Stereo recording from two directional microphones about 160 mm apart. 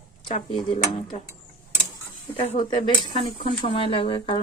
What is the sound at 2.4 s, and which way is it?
A woman's voice, 45° left (ahead or behind).